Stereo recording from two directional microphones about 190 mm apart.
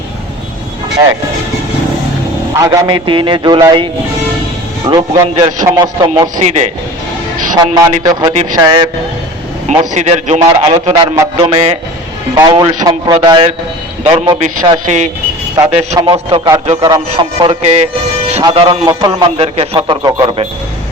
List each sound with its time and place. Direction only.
2.6 s a man's voice: 25° right (ahead or behind)
4.9 s a man's voice: 25° right (ahead or behind)
6.4 s a man's voice: 35° right (ahead or behind)
7.5 s a man's voice: 20° right (ahead or behind)
9.9 s a man's voice: 40° right (ahead or behind)
11.0 s a man's voice: 20° right (ahead or behind)
11.5 s a man's voice: 30° right (ahead or behind)